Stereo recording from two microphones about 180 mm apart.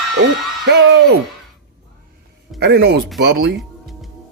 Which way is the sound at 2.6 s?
65° right (ahead or behind).